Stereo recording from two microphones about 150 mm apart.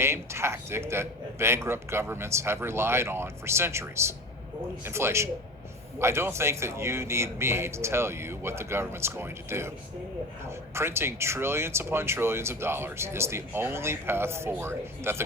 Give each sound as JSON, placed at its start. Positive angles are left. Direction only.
{"t": 0.0, "sound": "speech", "side_deg": -15}
{"t": 10.8, "sound": "speech", "side_deg": -15}